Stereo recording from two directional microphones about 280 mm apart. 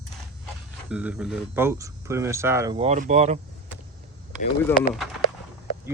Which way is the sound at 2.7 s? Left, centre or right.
Right.